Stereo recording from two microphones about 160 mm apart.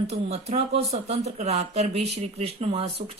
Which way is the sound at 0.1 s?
40° right (ahead or behind).